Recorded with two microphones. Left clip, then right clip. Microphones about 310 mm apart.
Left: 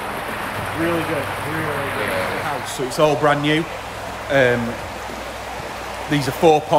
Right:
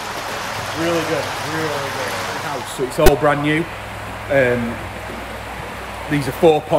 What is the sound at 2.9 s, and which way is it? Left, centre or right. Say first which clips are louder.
Speech: right 1 dB; centre.